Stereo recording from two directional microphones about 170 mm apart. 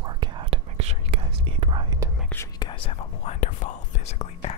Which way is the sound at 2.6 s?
30° left (ahead or behind).